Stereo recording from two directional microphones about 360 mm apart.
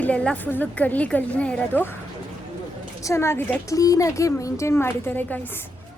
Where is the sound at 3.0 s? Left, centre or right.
Centre.